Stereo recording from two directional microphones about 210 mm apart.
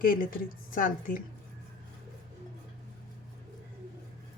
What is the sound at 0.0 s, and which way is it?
A woman's voice, 40° left (ahead or behind).